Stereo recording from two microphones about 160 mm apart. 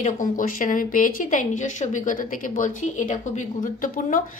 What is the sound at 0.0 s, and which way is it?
Speech, 55° left (ahead or behind).